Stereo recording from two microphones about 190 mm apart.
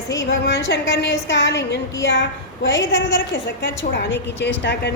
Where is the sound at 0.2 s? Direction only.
65° left (ahead or behind).